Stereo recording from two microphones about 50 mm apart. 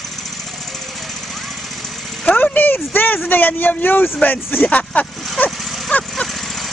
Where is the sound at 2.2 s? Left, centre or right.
Left.